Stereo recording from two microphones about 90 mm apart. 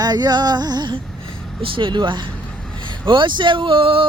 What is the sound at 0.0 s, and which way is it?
Music, 50° right (ahead or behind).